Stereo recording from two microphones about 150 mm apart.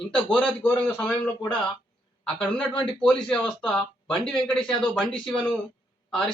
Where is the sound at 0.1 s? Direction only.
5° left (ahead or behind).